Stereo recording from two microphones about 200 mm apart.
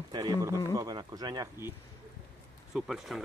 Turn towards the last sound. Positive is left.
turn(degrees=0)  # may be behind; listen again after turning